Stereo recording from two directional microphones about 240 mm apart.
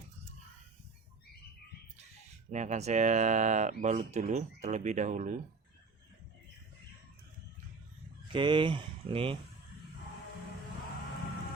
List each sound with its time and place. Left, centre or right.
2.5 s speech: right
8.3 s speech: right